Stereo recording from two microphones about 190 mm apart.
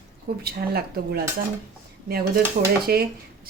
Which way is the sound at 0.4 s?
55° right (ahead or behind).